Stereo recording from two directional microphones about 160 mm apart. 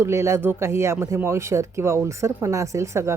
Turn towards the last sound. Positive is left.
turn(degrees=-15)  # may be behind; listen again after turning